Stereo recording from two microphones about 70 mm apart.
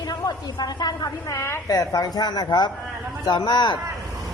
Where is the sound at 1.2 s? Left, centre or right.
Left.